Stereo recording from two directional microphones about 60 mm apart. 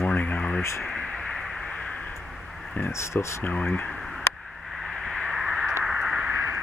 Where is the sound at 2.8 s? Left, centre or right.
Left.